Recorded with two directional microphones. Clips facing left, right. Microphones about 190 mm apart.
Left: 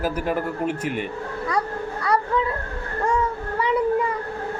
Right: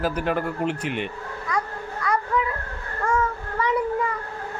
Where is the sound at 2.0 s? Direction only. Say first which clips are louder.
Left 2 dB; 35° left (ahead or behind).